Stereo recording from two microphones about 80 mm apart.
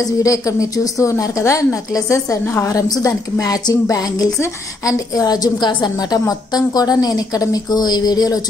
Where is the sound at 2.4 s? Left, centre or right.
Left.